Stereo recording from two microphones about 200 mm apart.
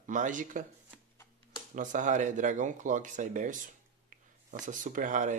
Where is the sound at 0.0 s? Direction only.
40° right (ahead or behind).